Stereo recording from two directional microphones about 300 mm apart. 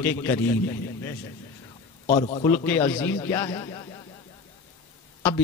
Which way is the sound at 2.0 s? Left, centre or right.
Left.